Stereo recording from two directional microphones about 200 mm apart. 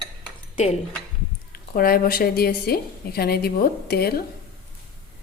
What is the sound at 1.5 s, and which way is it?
A woman's voice, 45° left (ahead or behind).